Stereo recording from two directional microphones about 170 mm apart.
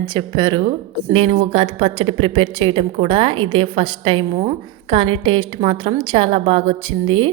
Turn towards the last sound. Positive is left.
turn(degrees=-30)  # may be behind; listen again after turning